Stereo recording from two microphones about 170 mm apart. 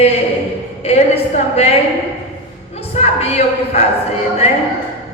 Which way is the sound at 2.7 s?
40° left (ahead or behind).